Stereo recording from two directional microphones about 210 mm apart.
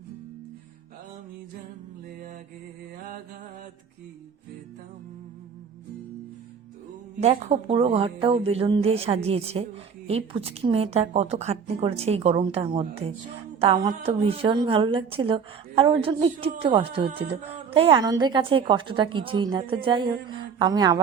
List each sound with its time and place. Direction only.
7.2 s a woman's voice: 30° right (ahead or behind)